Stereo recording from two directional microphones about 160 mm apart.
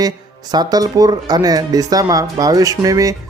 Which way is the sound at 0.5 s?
25° right (ahead or behind).